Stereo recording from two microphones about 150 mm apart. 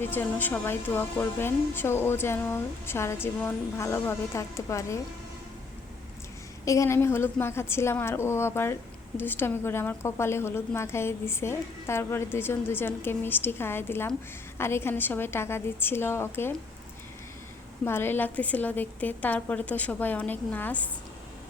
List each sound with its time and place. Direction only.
0.0 s speech: 15° left (ahead or behind)
6.7 s speech: 20° left (ahead or behind)
17.8 s speech: 15° left (ahead or behind)